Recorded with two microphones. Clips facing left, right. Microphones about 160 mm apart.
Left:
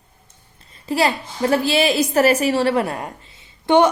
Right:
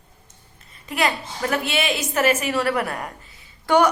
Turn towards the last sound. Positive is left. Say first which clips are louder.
# left 3 dB
turn(degrees=25)  # may be behind; listen again after turning